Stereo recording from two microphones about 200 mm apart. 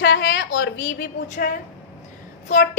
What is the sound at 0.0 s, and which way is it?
A woman's voice, 65° left (ahead or behind).